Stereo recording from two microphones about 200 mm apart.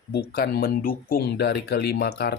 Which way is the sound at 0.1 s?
50° left (ahead or behind).